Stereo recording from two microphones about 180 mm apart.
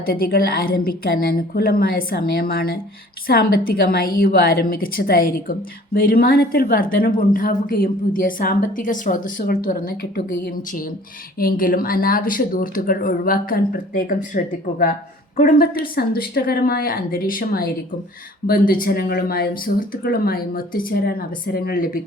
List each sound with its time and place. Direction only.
0.1 s a woman's voice: 55° left (ahead or behind)